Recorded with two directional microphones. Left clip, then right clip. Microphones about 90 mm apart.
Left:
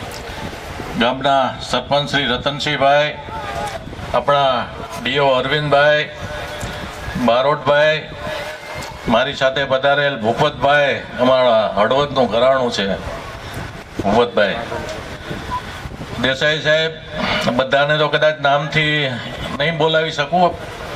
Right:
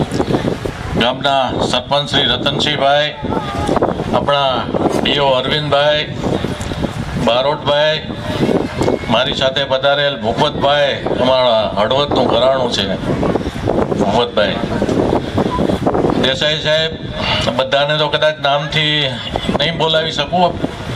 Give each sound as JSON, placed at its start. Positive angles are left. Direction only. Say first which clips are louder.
{"t": 0.9, "sound": "a man's voice", "louder": "right 1 dB", "side_deg": -20}
{"t": 4.3, "sound": "a man's voice", "louder": "left 1 dB", "side_deg": -20}
{"t": 7.3, "sound": "a man's voice", "louder": "even", "side_deg": -20}
{"t": 9.0, "sound": "a man's voice", "louder": "left 3 dB", "side_deg": -20}
{"t": 14.1, "sound": "a man's voice", "louder": "left 4 dB", "side_deg": -20}
{"t": 16.2, "sound": "a man's voice", "louder": "right 1 dB", "side_deg": -20}